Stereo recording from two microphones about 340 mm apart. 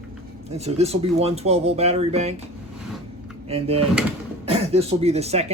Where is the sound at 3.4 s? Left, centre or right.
Centre.